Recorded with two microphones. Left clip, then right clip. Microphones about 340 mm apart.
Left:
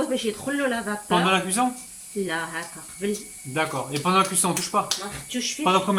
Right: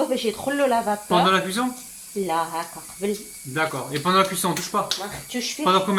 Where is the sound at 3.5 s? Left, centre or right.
Centre.